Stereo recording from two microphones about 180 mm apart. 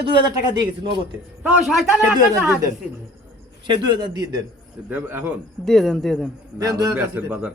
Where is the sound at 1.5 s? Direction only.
Centre (ahead or behind).